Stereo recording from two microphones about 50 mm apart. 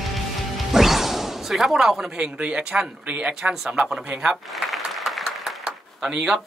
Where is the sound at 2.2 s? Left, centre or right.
Centre.